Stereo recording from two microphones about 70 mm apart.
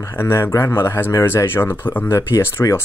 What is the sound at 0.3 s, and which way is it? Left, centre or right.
Speech, left.